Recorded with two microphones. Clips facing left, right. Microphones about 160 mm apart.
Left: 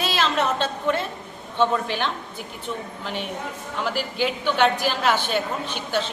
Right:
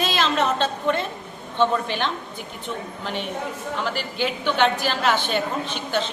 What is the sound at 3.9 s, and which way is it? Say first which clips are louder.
A woman's voice: left 1 dB; 5° left (ahead or behind).